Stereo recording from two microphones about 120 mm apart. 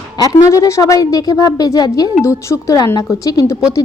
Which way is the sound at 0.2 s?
30° left (ahead or behind).